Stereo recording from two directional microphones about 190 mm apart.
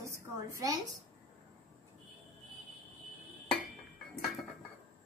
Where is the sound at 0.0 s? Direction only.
15° right (ahead or behind).